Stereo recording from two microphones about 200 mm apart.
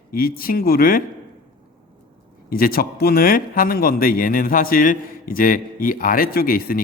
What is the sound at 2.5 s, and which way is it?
A man's voice, 45° left (ahead or behind).